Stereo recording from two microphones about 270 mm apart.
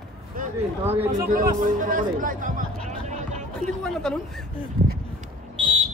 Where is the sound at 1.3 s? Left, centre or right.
Right.